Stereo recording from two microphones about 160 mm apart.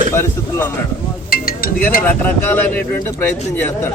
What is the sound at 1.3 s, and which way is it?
Music, 70° left (ahead or behind).